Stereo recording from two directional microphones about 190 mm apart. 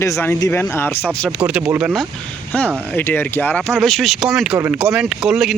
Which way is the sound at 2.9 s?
10° left (ahead or behind).